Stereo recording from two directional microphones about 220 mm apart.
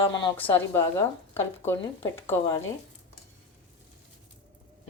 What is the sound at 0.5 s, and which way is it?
A woman's voice, 10° left (ahead or behind).